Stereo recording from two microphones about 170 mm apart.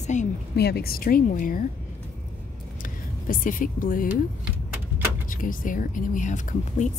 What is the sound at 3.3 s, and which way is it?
Speech, 55° left (ahead or behind).